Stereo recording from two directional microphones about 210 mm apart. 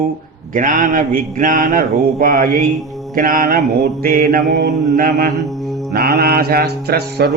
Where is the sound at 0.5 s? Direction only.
40° right (ahead or behind).